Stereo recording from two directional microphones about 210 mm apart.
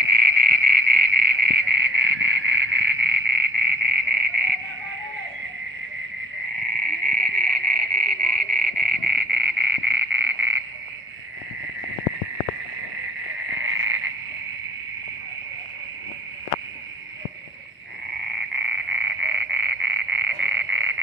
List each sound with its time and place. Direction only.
0.1 s frog: 50° right (ahead or behind)
7.1 s frog: 45° right (ahead or behind)
13.6 s frog: 65° right (ahead or behind)
18.1 s frog: 55° right (ahead or behind)